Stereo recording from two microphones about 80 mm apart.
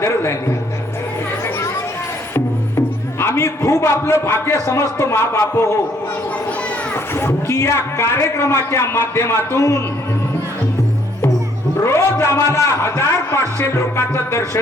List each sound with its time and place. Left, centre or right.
0.0 s a man's voice: left
2.3 s speech: left
6.9 s a man's voice: left
11.8 s a man's voice: left